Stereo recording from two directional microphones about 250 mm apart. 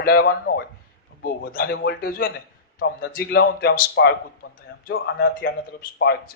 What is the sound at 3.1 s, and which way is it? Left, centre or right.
A man's voice, left.